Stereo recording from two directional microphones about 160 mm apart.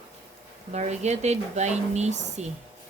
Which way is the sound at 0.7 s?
45° right (ahead or behind).